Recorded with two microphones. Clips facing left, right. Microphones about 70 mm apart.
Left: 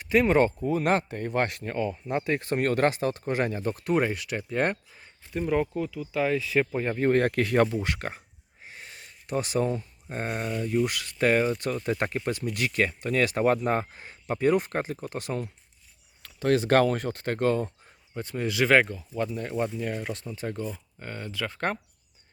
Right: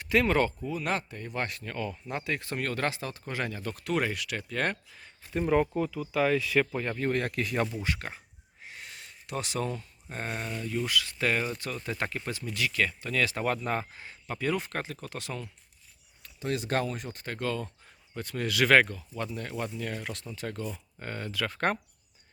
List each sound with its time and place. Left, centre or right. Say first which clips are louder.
0.1 s speech: left 3 dB; centre
0.6 s speech: left 7 dB; left
1.6 s speech: left 6 dB; left
5.3 s speech: even; centre; by 8.2 s left
8.6 s a sound: even; left
10.8 s speech: left 4 dB; left
16.2 s speech: left 9 dB; left
18.1 s speech: left 2 dB; centre
21.0 s speech: even; centre